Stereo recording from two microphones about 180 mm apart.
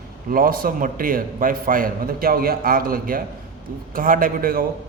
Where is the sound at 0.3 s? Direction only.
50° right (ahead or behind).